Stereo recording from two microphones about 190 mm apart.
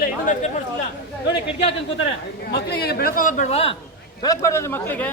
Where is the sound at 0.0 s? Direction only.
45° left (ahead or behind).